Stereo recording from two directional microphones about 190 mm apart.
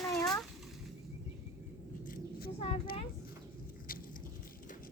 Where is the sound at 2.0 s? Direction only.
50° left (ahead or behind).